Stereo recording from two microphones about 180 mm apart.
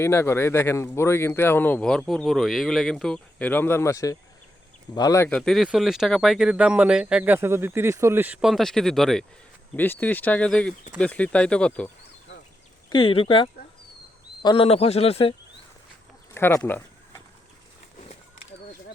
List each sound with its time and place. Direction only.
0.0 s speech: 15° left (ahead or behind)
12.9 s speech: 30° left (ahead or behind)
16.3 s a sound: 15° left (ahead or behind)